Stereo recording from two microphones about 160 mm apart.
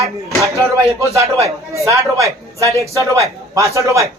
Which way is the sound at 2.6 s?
20° left (ahead or behind).